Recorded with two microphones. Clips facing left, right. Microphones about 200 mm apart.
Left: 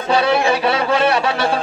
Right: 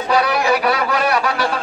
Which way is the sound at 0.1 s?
25° left (ahead or behind).